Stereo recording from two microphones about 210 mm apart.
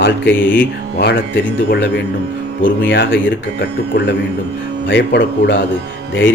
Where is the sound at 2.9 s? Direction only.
55° left (ahead or behind).